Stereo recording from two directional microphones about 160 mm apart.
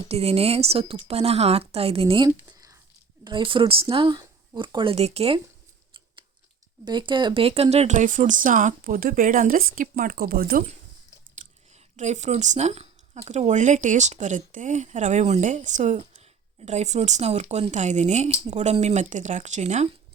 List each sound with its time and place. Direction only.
0.1 s speech: 40° right (ahead or behind)
6.8 s speech: 30° right (ahead or behind); by 10.7 s 70° right (ahead or behind)
11.7 s speech: 45° right (ahead or behind)